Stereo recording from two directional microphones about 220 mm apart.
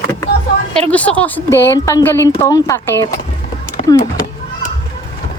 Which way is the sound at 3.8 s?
30° left (ahead or behind).